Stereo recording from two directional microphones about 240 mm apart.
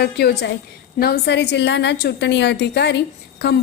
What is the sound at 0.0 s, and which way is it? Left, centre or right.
A woman's voice, left.